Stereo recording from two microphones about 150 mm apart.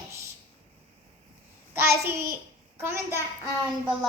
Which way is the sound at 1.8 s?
20° right (ahead or behind).